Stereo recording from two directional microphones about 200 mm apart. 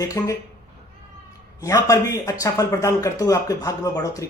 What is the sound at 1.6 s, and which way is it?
Speech, 15° left (ahead or behind).